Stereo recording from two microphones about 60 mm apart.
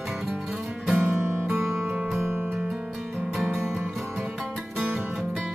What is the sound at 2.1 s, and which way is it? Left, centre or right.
Music, right.